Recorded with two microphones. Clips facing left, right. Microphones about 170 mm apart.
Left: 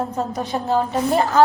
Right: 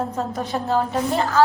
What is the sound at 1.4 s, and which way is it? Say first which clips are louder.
Speech: left 2 dB; 20° left (ahead or behind).